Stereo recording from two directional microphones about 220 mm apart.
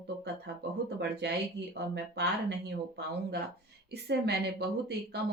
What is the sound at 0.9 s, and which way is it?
A woman's voice, 50° right (ahead or behind).